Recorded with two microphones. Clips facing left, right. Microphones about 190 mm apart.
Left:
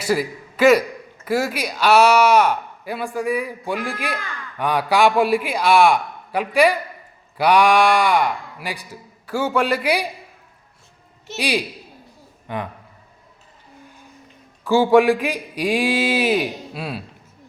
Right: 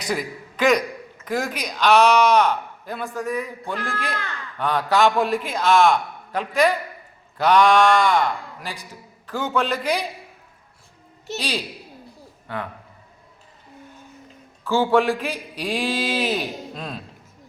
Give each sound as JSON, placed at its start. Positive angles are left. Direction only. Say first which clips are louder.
{"t": 0.0, "sound": "a man's voice", "louder": "left 5 dB", "side_deg": 5}
{"t": 11.3, "sound": "a man's voice", "louder": "left 6 dB", "side_deg": 15}
{"t": 14.6, "sound": "a man's voice", "louder": "left 5 dB", "side_deg": 15}